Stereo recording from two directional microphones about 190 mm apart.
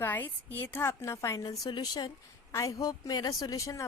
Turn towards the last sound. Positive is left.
turn(degrees=15)  # may be behind; listen again after turning